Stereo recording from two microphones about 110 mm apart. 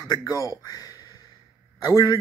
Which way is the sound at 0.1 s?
30° left (ahead or behind).